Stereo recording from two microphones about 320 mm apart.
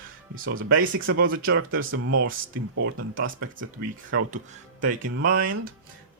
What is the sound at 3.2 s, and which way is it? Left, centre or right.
Speech, right.